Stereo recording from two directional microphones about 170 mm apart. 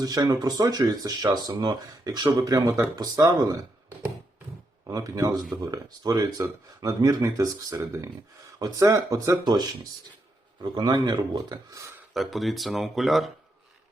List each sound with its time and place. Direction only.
0.0 s speech: 20° right (ahead or behind)
4.9 s speech: 20° right (ahead or behind)
12.1 s speech: centre (ahead or behind)